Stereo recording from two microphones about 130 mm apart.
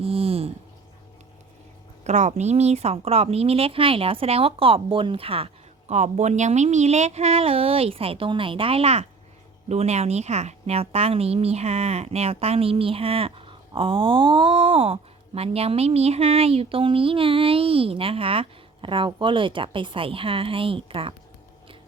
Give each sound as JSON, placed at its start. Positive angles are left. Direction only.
{"t": 0.0, "sound": "a sound", "side_deg": -50}
{"t": 2.0, "sound": "speech", "side_deg": -65}
{"t": 5.9, "sound": "speech", "side_deg": -60}